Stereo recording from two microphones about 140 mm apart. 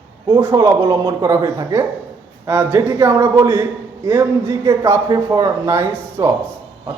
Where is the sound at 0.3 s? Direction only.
25° right (ahead or behind).